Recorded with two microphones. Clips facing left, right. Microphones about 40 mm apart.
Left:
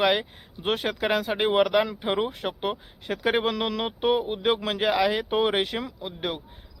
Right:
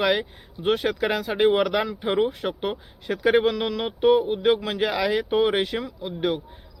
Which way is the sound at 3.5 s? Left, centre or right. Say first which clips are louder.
Right 1 dB; left.